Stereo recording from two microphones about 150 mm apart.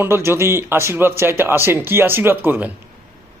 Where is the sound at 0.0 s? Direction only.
15° right (ahead or behind).